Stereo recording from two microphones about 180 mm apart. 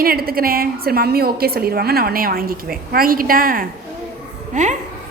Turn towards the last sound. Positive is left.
turn(degrees=-40)  # may be behind; listen again after turning